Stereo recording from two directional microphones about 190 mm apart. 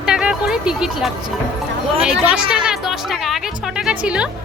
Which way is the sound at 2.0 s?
5° right (ahead or behind).